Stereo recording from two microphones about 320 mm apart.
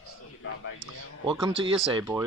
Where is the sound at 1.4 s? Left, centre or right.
Centre.